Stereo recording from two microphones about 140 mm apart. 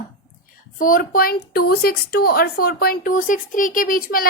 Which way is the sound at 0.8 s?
85° left.